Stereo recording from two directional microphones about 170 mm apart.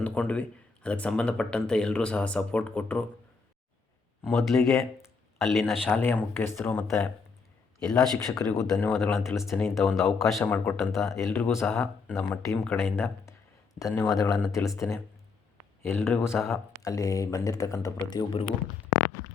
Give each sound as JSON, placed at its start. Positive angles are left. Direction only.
{"t": 0.0, "sound": "speech", "side_deg": 5}
{"t": 4.3, "sound": "speech", "side_deg": 0}
{"t": 6.0, "sound": "speech", "side_deg": 10}
{"t": 9.0, "sound": "speech", "side_deg": 0}
{"t": 9.5, "sound": "speech", "side_deg": 10}
{"t": 9.7, "sound": "speech", "side_deg": 0}
{"t": 10.4, "sound": "speech", "side_deg": 10}
{"t": 11.3, "sound": "speech", "side_deg": 15}
{"t": 13.7, "sound": "speech", "side_deg": 20}